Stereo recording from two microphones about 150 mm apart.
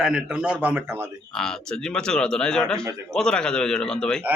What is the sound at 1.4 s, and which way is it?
A man's voice, 5° left (ahead or behind).